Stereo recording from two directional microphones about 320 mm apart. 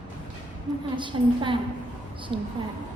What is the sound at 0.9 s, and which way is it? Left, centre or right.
A woman's voice, centre.